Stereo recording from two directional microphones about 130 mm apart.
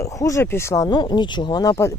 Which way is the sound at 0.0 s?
25° left (ahead or behind).